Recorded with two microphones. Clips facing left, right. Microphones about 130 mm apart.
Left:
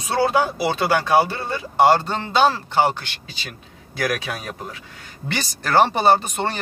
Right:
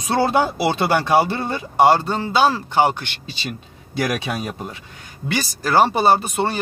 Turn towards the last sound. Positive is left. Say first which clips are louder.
# right 1 dB
turn(degrees=-10)  # may be behind; listen again after turning